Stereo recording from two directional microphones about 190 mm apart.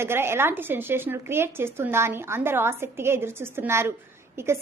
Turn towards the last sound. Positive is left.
turn(degrees=-15)  # may be behind; listen again after turning